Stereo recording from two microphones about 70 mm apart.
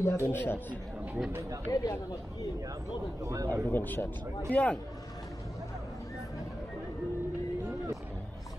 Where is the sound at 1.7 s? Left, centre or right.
Left.